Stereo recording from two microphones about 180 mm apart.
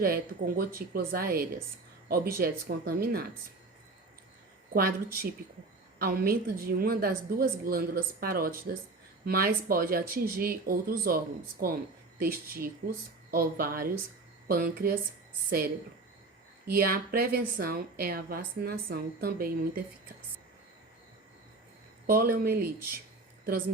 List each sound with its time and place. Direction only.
0.0 s a woman's voice: 55° right (ahead or behind)
4.7 s a woman's voice: 55° right (ahead or behind)
12.2 s a woman's voice: 55° right (ahead or behind)
16.7 s a woman's voice: 55° right (ahead or behind)
22.0 s a woman's voice: 55° right (ahead or behind)